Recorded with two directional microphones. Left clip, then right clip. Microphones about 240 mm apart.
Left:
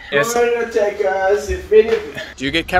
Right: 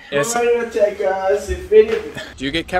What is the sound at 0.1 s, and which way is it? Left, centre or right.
Speech, right.